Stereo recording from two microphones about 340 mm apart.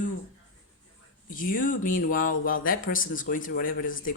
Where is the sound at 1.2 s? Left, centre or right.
Left.